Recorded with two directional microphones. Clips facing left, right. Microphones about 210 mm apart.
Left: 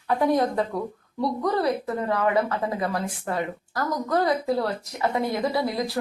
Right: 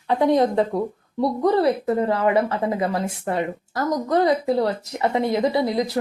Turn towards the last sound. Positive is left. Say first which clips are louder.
# right 4 dB
turn(degrees=-20)  # may be behind; listen again after turning